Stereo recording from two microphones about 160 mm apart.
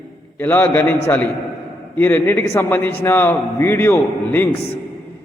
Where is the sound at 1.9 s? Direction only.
15° left (ahead or behind).